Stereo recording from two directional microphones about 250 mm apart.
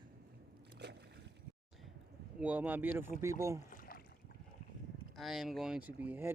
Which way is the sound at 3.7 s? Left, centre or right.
Left.